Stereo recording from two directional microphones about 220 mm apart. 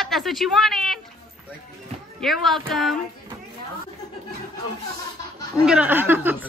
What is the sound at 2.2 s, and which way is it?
Speech, centre (ahead or behind).